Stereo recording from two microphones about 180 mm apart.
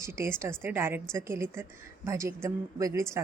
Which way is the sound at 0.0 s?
15° right (ahead or behind).